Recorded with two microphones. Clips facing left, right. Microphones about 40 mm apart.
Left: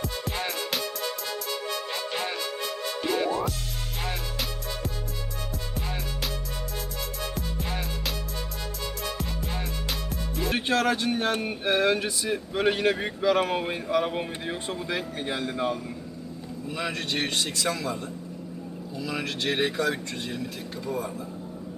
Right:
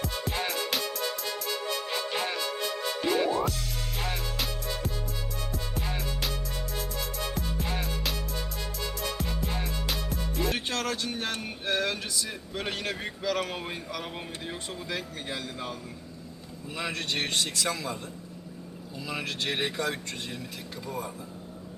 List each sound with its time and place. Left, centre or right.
0.0 s music: centre
7.3 s music: centre
9.1 s music: centre
10.5 s speech: centre
16.6 s speech: centre